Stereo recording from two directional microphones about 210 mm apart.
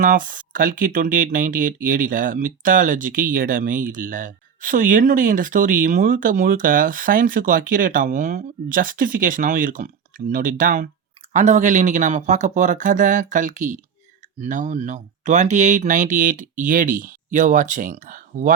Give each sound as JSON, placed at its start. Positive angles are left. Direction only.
{"t": 0.0, "sound": "speech", "side_deg": -40}